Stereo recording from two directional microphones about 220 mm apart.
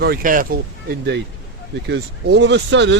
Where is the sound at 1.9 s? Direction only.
55° right (ahead or behind).